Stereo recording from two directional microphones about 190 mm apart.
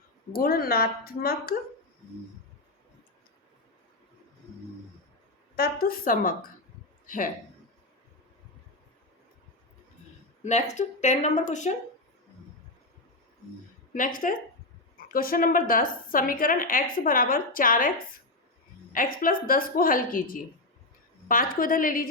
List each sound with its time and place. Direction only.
0.3 s a woman's voice: 50° left (ahead or behind)
5.5 s a woman's voice: 50° left (ahead or behind)
10.4 s speech: 40° left (ahead or behind)
13.9 s a woman's voice: 45° left (ahead or behind)
18.9 s a woman's voice: 50° left (ahead or behind)